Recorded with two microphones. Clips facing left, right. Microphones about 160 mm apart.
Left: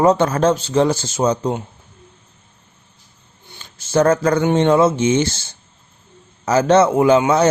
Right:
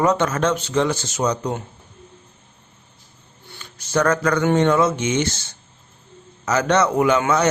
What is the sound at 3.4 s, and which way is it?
Speech, 25° left (ahead or behind).